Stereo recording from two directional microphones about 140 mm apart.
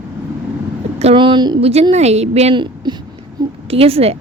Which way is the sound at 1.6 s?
45° right (ahead or behind).